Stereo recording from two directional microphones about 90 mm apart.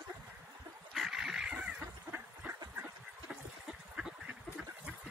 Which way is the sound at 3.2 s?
5° right (ahead or behind).